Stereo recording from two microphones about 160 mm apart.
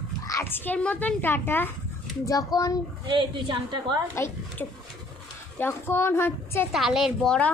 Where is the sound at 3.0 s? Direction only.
30° right (ahead or behind).